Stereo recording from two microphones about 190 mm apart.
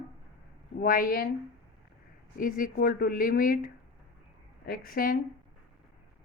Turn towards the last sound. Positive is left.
turn(degrees=50)  # may be behind; listen again after turning